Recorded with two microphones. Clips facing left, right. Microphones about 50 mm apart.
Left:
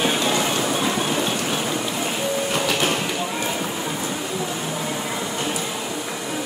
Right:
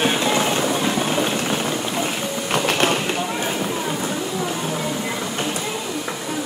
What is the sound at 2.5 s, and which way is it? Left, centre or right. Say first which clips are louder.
Printer: right 6 dB; right.